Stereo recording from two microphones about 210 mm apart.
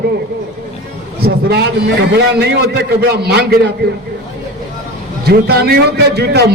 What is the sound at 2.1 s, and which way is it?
A man's voice, 50° right (ahead or behind).